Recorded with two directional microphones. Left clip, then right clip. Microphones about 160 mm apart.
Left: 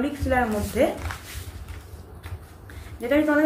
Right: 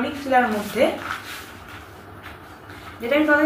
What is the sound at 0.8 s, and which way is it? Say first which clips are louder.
Speech: right 2 dB; 50° left (ahead or behind).